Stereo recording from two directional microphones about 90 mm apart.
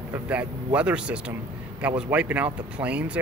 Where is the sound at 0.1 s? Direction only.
15° right (ahead or behind).